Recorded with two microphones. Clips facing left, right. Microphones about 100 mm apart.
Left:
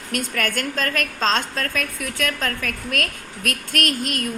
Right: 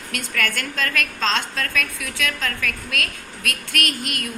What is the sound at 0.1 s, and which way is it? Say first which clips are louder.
A woman's voice: left 2 dB; 45° left (ahead or behind).